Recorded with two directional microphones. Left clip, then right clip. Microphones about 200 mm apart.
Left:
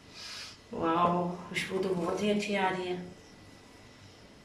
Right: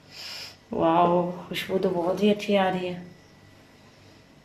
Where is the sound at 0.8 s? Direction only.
45° right (ahead or behind).